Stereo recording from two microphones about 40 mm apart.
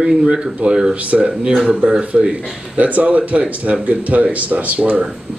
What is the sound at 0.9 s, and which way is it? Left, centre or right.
Speech, right.